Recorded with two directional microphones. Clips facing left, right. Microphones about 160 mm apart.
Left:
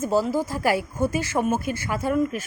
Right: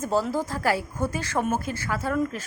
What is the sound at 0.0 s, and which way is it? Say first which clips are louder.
Speech: left 3 dB; 10° left (ahead or behind).